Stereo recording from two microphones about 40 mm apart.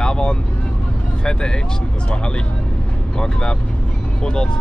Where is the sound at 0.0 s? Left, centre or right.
Left.